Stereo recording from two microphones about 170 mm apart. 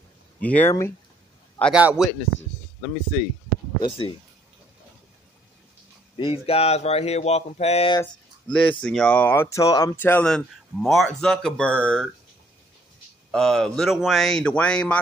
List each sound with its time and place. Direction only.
0.4 s speech: 10° left (ahead or behind)
1.6 s speech: 5° right (ahead or behind)
3.8 s speech: 30° left (ahead or behind)
6.1 s speech: 35° left (ahead or behind)
8.0 s speech: 5° left (ahead or behind); by 9.9 s 20° left (ahead or behind)
9.9 s speech: 10° left (ahead or behind)
13.3 s speech: centre (ahead or behind)